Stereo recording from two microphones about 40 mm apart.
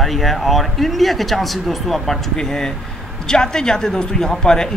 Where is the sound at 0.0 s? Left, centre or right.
Centre.